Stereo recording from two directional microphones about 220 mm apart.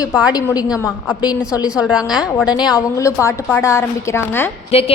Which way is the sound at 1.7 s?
5° right (ahead or behind).